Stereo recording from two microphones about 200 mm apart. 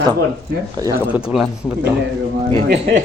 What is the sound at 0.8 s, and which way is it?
Speech, 20° right (ahead or behind).